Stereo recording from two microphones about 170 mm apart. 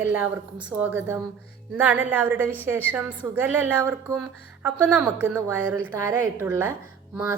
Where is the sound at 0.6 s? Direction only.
10° right (ahead or behind).